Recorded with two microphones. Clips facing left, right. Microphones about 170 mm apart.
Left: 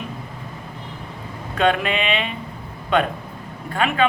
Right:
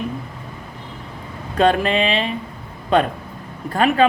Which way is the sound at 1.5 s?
35° right (ahead or behind).